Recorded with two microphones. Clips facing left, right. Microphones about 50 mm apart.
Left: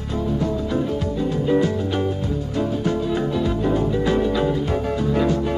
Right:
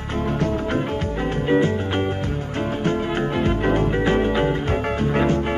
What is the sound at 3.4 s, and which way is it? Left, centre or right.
Music, right.